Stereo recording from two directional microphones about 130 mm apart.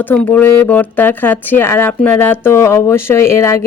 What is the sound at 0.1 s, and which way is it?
Speech, 15° left (ahead or behind).